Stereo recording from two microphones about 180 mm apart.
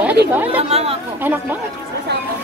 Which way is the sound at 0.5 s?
35° right (ahead or behind).